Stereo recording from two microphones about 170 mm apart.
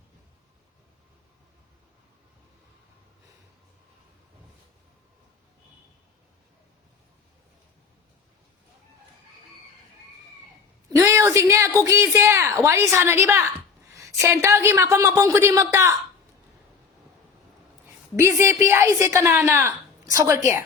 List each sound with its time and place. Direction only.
10.9 s a woman's voice: 15° right (ahead or behind)
17.8 s a woman's voice: 15° right (ahead or behind)